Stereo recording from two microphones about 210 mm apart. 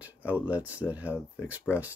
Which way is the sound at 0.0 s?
5° right (ahead or behind).